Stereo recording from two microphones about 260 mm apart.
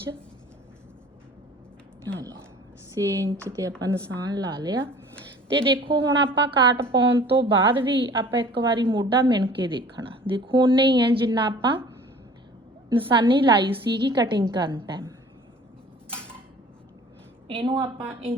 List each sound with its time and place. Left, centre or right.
2.9 s a woman's voice: centre
5.8 s a woman's voice: centre
12.9 s a woman's voice: centre
17.5 s a woman's voice: centre
17.8 s a woman's voice: centre